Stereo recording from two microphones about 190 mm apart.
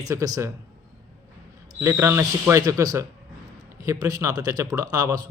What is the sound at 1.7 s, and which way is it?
A man's voice, 10° right (ahead or behind).